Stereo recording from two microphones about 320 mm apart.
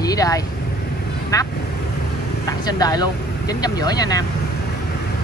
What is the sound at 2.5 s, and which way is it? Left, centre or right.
Speech, centre.